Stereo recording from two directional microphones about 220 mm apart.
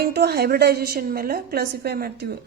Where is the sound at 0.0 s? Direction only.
45° right (ahead or behind).